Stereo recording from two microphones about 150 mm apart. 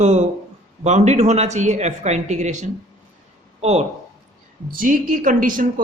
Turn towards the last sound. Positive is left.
turn(degrees=-65)  # may be behind; listen again after turning